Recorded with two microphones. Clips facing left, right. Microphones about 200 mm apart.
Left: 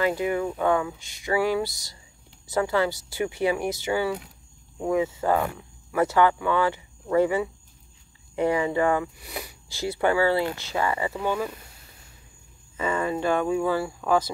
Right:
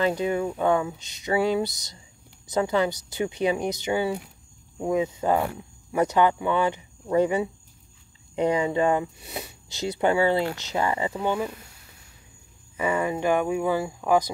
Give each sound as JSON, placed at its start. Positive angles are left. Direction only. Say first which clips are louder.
{"t": 0.0, "sound": "speech", "louder": "even", "side_deg": -20}
{"t": 12.7, "sound": "speech", "louder": "right 1 dB", "side_deg": -15}